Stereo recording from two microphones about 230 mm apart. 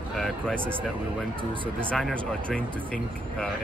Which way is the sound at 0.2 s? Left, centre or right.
Centre.